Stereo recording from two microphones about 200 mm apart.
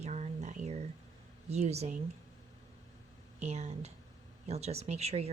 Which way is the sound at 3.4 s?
35° right (ahead or behind).